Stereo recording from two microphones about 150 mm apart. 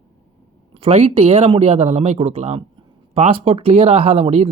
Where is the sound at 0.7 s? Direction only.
45° right (ahead or behind).